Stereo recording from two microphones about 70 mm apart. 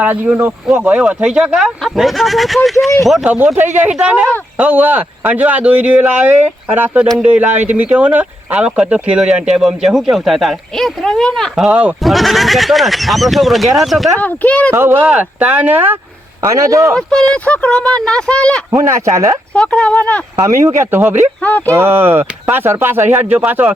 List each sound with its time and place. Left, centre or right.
0.0 s speech: right
1.0 s speech: centre
3.2 s speech: right; by 11.5 s centre
11.7 s speech: right
12.0 s speech: centre
14.2 s speech: left
14.7 s speech: right
15.1 s speech: centre
16.4 s speech: right
16.9 s speech: centre
18.8 s speech: right
19.5 s speech: centre
20.4 s speech: right